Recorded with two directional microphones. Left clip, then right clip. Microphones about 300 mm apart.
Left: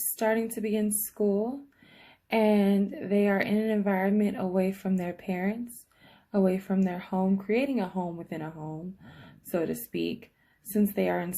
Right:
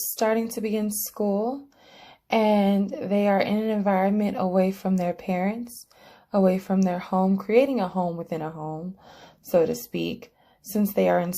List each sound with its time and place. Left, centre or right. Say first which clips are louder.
0.2 s a woman's voice: right 4 dB; centre